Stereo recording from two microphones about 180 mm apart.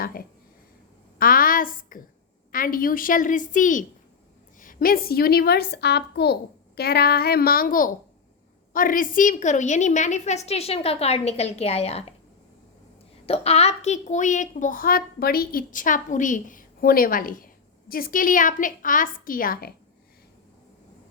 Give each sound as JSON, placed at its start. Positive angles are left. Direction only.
{"t": 0.0, "sound": "a woman's voice", "side_deg": 55}
{"t": 13.2, "sound": "a woman's voice", "side_deg": 35}